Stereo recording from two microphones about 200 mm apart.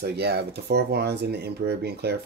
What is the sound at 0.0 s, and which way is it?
Speech, 55° right (ahead or behind).